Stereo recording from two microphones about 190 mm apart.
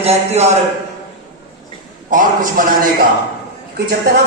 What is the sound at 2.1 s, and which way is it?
Speech, 45° right (ahead or behind).